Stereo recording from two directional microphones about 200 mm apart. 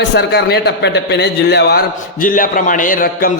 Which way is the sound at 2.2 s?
45° left (ahead or behind).